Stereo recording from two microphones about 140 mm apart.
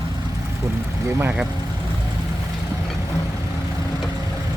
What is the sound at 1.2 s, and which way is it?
Speech, 10° right (ahead or behind).